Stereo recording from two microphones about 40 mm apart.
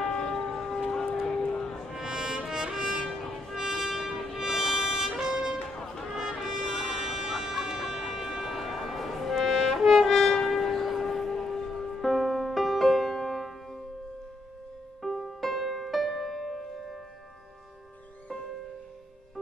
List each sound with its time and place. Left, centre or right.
0.0 s church bell: centre
2.0 s music: centre
3.0 s music: centre
3.5 s music: centre
8.5 s music: centre
9.8 s brass instrument: centre
15.0 s music: centre